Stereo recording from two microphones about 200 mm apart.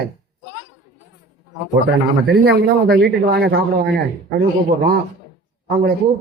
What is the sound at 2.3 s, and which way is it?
A man's voice, 55° right (ahead or behind).